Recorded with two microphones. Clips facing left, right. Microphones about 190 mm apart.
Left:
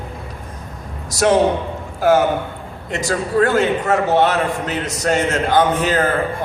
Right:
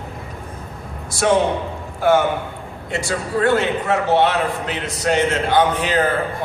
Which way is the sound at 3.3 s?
45° left (ahead or behind).